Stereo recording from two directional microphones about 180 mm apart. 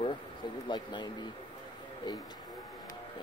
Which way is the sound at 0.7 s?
25° left (ahead or behind).